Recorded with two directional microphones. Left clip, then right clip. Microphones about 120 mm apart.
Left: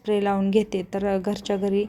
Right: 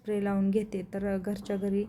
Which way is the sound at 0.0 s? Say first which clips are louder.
Left 8 dB; 25° left (ahead or behind).